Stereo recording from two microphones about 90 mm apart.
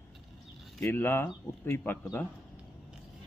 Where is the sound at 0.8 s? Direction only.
25° left (ahead or behind).